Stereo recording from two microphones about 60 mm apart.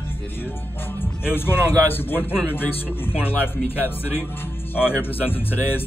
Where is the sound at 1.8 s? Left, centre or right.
Left.